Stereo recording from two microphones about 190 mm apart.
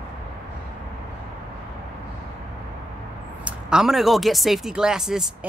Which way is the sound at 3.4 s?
5° right (ahead or behind).